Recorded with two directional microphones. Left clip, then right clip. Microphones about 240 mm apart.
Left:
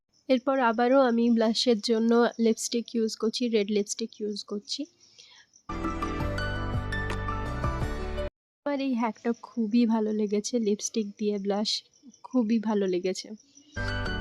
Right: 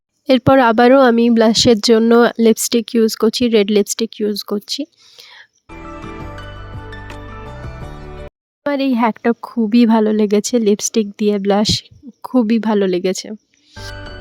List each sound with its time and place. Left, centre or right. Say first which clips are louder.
0.3 s speech: right 13 dB; right
8.6 s speech: right 13 dB; right